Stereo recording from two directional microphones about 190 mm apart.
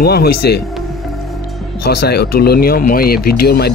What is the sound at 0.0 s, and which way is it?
Speech, 55° left (ahead or behind).